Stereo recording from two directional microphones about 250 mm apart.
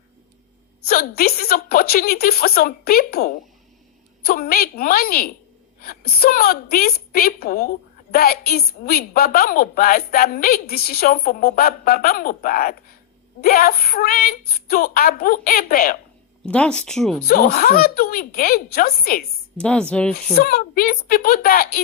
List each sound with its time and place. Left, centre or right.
0.9 s a woman's voice: left
16.5 s speech: centre
17.2 s a woman's voice: left
19.5 s speech: centre
20.3 s a woman's voice: left